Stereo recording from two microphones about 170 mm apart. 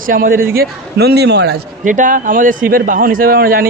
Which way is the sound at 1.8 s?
50° right (ahead or behind).